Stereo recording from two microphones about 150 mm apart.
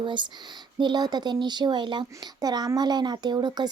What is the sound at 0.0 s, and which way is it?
Speech, 30° right (ahead or behind).